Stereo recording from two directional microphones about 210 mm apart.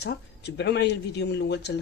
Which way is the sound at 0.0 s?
55° left (ahead or behind).